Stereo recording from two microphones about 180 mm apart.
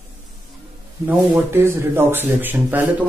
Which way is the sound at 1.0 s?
10° right (ahead or behind).